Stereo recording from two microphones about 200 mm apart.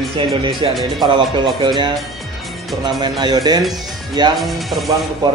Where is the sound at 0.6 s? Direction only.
25° right (ahead or behind).